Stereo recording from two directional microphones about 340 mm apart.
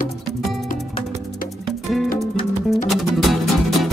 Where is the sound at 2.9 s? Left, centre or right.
Centre.